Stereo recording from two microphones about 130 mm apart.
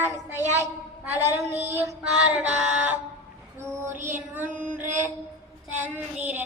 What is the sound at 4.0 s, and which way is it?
Mantra, 75° right (ahead or behind).